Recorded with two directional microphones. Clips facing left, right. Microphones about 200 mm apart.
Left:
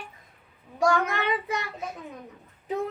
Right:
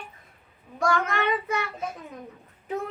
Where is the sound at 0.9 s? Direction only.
15° left (ahead or behind).